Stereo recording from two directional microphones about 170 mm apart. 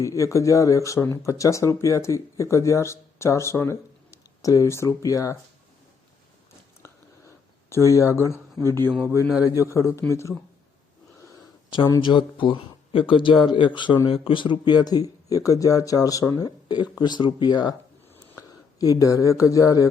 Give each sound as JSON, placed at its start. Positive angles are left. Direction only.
{"t": 0.0, "sound": "speech", "side_deg": 20}
{"t": 7.9, "sound": "speech", "side_deg": 15}